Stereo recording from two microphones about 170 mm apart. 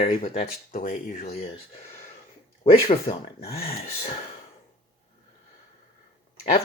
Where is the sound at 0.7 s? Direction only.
50° left (ahead or behind).